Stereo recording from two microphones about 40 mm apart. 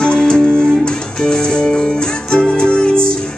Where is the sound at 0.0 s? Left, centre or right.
Centre.